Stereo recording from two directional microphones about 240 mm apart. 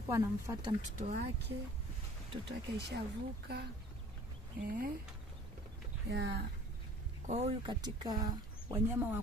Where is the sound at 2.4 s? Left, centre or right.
Right.